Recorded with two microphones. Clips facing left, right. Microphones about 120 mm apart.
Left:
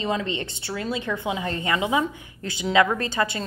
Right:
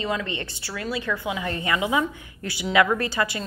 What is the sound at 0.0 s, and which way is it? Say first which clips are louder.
A woman's voice: left 2 dB; 25° left (ahead or behind).